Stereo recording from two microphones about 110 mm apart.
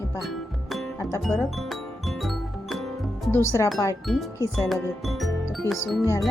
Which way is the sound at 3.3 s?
25° left (ahead or behind).